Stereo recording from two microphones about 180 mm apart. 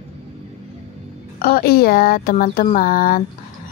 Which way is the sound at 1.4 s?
55° left (ahead or behind).